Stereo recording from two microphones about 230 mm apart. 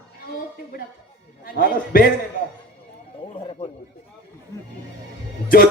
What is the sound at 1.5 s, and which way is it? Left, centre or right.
Speech, left.